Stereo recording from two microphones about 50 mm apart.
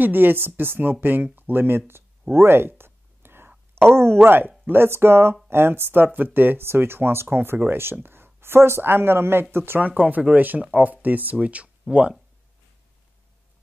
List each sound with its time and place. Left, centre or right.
0.0 s speech: right
2.3 s a sound: right
4.2 s speech: right
9.8 s speech: right